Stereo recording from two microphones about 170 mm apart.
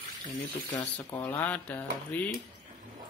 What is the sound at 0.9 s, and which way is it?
Speech, 10° left (ahead or behind).